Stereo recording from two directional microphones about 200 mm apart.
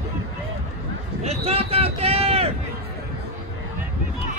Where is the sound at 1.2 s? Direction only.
30° right (ahead or behind).